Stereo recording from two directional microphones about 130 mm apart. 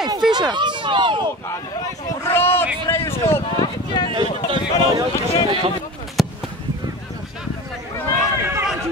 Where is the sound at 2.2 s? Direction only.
15° left (ahead or behind).